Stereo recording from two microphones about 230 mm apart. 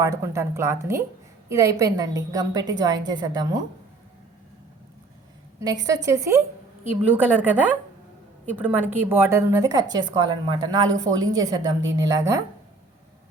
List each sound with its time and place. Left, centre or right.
0.0 s a woman's voice: centre
5.5 s a woman's voice: centre